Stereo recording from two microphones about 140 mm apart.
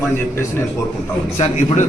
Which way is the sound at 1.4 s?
60° left (ahead or behind).